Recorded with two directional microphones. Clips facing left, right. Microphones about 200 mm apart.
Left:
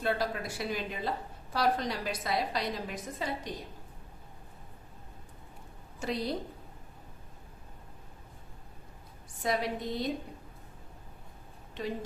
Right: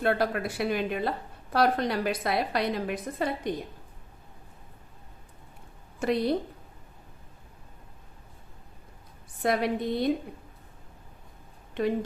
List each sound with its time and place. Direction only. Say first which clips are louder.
0.0 s a woman's voice: right 5 dB; 60° right (ahead or behind)
6.0 s a woman's voice: right 7 dB; 60° right (ahead or behind)
9.4 s a woman's voice: right 5 dB; 60° right (ahead or behind)
11.8 s a woman's voice: right 9 dB; 55° right (ahead or behind)